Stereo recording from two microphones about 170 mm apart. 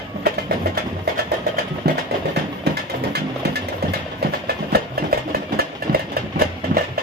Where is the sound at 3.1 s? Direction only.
70° right (ahead or behind).